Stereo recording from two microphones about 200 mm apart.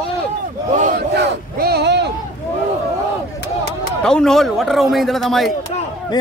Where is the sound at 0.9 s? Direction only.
55° right (ahead or behind).